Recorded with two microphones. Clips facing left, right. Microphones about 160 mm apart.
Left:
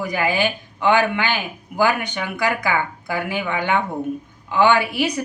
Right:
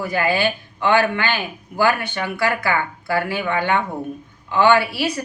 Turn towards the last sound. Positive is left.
turn(degrees=15)  # may be behind; listen again after turning